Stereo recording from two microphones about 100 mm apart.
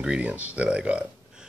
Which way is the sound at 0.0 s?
10° right (ahead or behind).